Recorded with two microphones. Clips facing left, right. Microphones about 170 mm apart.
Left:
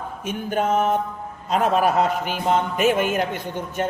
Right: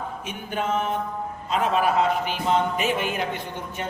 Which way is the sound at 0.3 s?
45° left (ahead or behind).